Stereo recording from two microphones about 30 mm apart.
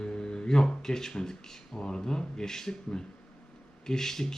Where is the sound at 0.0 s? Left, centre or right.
Left.